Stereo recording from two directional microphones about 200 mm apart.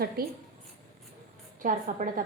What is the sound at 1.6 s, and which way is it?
Speech, 40° right (ahead or behind).